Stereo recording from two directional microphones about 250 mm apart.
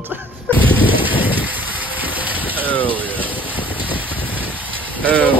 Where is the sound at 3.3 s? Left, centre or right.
Centre.